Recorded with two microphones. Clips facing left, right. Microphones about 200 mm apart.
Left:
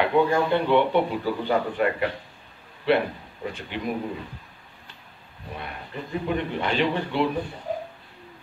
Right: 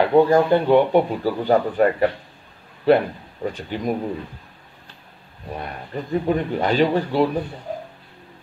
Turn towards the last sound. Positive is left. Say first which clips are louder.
# right 6 dB
turn(degrees=-40)  # may be behind; listen again after turning